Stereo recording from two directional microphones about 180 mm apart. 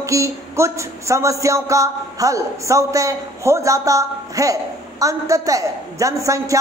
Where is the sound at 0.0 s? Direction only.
15° right (ahead or behind).